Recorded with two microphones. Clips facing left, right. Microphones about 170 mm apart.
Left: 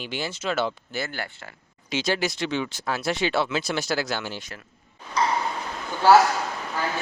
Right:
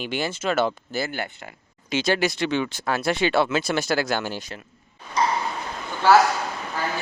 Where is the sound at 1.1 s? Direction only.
20° right (ahead or behind).